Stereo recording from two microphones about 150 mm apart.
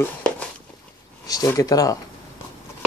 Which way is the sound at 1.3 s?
25° left (ahead or behind).